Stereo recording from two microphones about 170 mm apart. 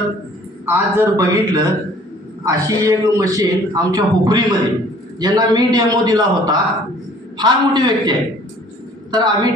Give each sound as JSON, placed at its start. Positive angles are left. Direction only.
{"t": 0.7, "sound": "a man's voice", "side_deg": -15}